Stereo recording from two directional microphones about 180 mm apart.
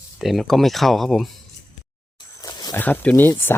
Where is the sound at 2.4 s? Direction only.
20° left (ahead or behind).